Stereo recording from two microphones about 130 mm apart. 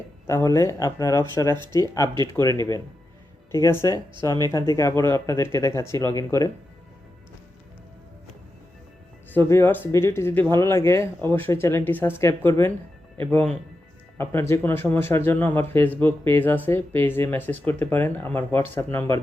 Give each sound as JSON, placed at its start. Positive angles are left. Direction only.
{"t": 0.3, "sound": "speech", "side_deg": 20}
{"t": 9.3, "sound": "speech", "side_deg": 20}